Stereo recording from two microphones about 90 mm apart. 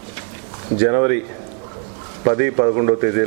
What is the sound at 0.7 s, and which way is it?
Speech, 20° right (ahead or behind).